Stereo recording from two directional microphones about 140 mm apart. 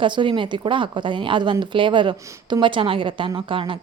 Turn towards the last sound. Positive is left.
turn(degrees=-35)  # may be behind; listen again after turning